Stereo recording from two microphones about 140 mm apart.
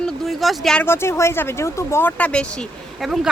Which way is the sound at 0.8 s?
15° left (ahead or behind).